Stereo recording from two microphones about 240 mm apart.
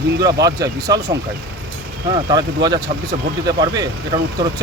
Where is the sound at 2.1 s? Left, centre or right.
Centre.